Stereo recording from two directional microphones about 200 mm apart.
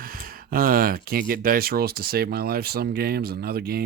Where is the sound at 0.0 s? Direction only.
45° right (ahead or behind).